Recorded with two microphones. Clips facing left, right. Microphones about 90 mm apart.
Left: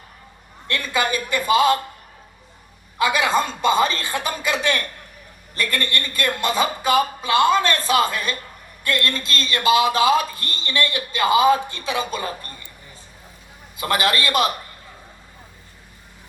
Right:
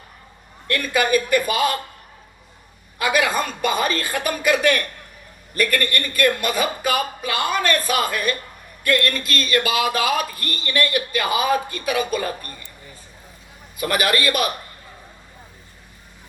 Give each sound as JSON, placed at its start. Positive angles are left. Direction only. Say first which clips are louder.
{"t": 0.7, "sound": "speech", "louder": "right 3 dB", "side_deg": 25}
{"t": 3.0, "sound": "speech", "louder": "left 1 dB", "side_deg": 25}
{"t": 13.7, "sound": "speech", "louder": "even", "side_deg": 25}